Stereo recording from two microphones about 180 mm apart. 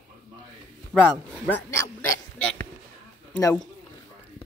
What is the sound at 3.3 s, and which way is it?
Speech, 15° left (ahead or behind).